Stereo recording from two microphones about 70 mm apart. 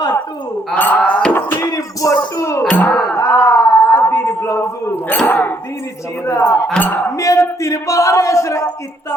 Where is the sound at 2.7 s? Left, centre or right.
Left.